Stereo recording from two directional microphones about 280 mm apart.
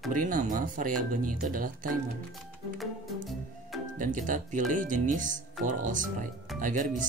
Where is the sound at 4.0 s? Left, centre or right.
Right.